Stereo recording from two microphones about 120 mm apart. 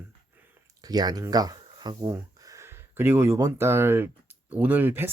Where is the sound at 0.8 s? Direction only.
35° right (ahead or behind).